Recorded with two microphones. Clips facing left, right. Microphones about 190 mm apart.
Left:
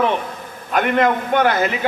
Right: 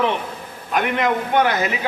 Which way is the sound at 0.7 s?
55° left (ahead or behind).